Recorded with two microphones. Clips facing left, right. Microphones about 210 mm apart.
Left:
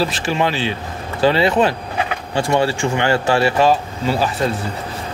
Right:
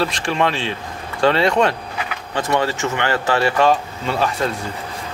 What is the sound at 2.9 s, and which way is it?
Speech, 25° left (ahead or behind).